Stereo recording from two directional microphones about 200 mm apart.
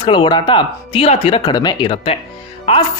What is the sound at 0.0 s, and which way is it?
Speech, 25° left (ahead or behind).